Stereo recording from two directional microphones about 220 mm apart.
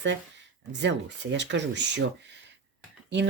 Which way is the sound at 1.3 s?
55° right (ahead or behind).